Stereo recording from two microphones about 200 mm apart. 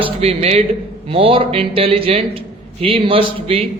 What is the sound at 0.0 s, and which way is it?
A man's voice, 30° right (ahead or behind).